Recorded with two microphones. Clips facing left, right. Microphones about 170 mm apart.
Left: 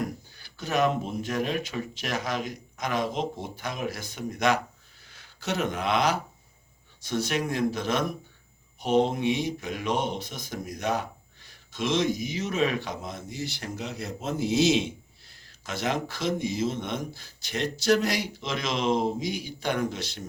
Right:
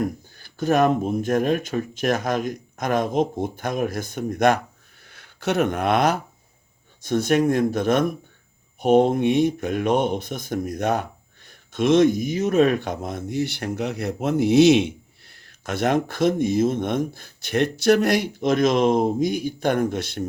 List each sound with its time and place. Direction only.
0.3 s speech: 50° right (ahead or behind)